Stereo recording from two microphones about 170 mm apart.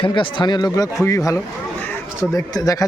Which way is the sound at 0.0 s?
30° left (ahead or behind).